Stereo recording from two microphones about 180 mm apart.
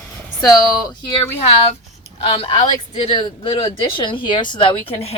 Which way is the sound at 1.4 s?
35° left (ahead or behind).